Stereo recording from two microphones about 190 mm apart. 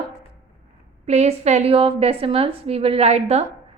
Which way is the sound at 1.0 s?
35° right (ahead or behind).